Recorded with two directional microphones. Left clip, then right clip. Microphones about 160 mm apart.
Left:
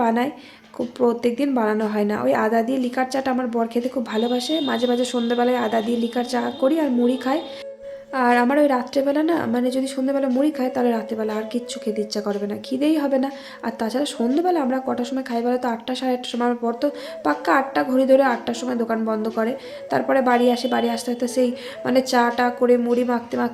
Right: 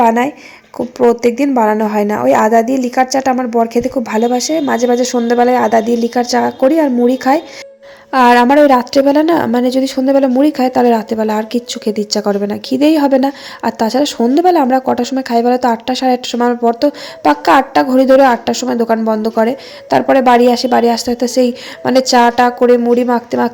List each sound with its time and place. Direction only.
0.0 s a woman's voice: 30° right (ahead or behind)
8.1 s speech: 55° right (ahead or behind)